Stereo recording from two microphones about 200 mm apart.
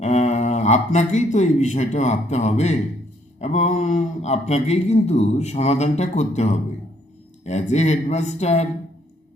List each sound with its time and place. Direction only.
0.0 s a man's voice: 35° left (ahead or behind)